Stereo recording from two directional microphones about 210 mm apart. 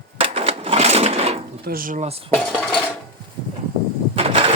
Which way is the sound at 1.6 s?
45° right (ahead or behind).